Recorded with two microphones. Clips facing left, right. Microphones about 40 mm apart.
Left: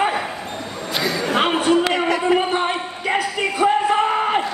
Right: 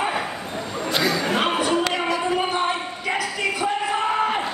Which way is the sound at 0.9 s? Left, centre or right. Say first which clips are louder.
Even; centre.